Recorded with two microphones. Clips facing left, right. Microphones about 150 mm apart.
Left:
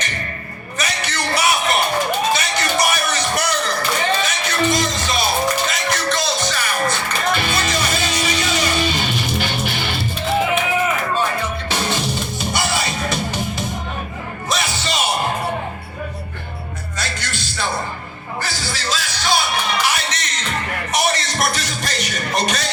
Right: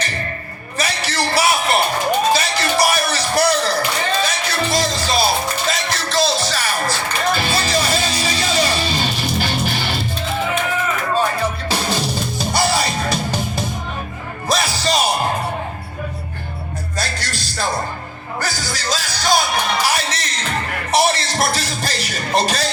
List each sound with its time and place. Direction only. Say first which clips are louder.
0.8 s a sound: right 3 dB; 30° right (ahead or behind)
2.3 s music: right 2 dB; 30° right (ahead or behind)
12.4 s music: right 5 dB; 35° right (ahead or behind)
14.5 s music: right 4 dB; 35° right (ahead or behind)
17.0 s music: right 1 dB; 35° right (ahead or behind)